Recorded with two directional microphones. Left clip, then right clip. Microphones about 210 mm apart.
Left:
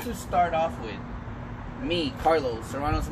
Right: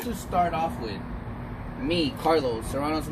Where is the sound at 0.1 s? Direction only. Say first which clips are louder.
Left 1 dB; 15° right (ahead or behind).